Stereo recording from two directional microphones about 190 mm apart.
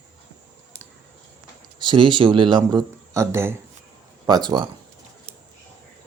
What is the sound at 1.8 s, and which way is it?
Speech, 25° right (ahead or behind).